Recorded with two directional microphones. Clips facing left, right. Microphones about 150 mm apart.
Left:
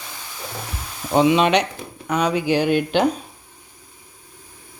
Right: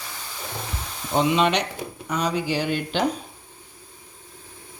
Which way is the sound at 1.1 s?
80° left.